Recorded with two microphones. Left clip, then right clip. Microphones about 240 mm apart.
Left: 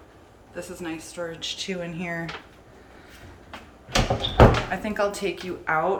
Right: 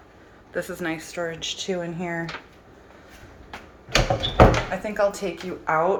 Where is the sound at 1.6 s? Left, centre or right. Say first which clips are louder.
Right 3 dB; centre.